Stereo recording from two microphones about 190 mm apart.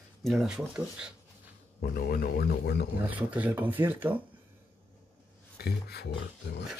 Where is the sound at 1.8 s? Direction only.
50° left (ahead or behind).